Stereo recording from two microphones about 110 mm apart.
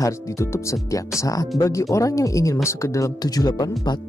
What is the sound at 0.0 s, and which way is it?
Speech, 25° left (ahead or behind).